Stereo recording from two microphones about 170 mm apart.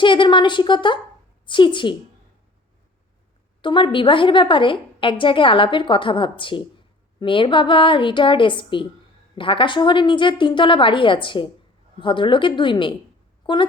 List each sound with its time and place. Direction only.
0.0 s a woman's voice: 30° left (ahead or behind)
3.6 s a woman's voice: 30° left (ahead or behind)